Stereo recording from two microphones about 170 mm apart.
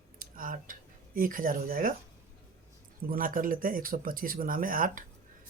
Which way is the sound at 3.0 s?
55° right (ahead or behind).